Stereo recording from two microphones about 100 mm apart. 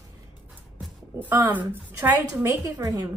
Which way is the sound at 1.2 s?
20° right (ahead or behind).